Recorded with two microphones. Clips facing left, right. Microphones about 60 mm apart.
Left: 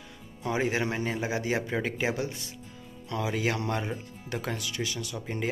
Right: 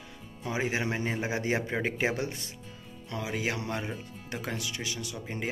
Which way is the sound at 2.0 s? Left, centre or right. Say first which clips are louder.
Even; right.